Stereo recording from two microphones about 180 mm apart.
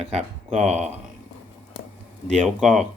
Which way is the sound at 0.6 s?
35° right (ahead or behind).